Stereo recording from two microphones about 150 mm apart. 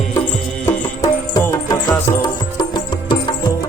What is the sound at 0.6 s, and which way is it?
Music, 25° left (ahead or behind).